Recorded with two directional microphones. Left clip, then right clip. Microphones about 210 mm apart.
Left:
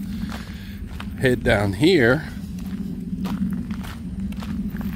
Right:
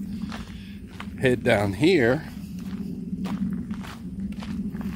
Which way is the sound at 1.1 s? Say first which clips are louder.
Left 2 dB; 5° right (ahead or behind).